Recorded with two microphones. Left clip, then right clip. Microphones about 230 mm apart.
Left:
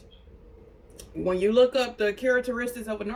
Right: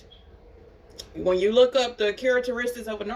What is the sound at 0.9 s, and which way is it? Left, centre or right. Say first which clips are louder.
Speech: right 3 dB; centre.